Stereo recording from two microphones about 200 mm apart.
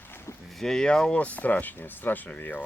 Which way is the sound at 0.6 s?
5° left (ahead or behind).